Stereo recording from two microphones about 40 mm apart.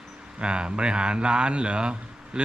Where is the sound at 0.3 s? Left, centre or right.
Right.